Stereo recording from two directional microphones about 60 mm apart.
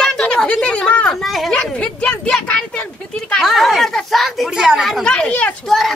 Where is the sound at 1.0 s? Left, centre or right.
Centre.